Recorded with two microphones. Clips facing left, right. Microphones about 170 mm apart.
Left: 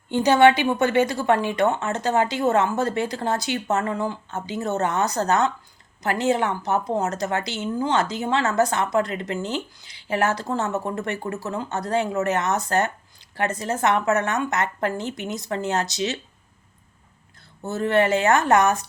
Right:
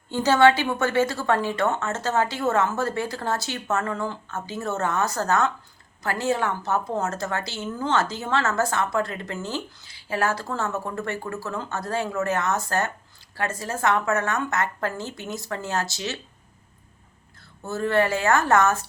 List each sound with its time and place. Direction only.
0.1 s a woman's voice: 15° left (ahead or behind)
17.6 s a woman's voice: 20° left (ahead or behind)